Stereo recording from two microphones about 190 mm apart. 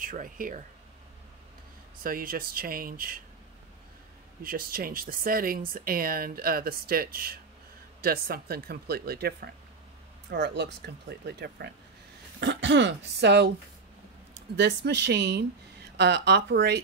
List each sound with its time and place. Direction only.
0.0 s speech: 45° right (ahead or behind)
2.0 s speech: 50° right (ahead or behind)
4.4 s speech: 50° right (ahead or behind)
14.6 s speech: 65° right (ahead or behind)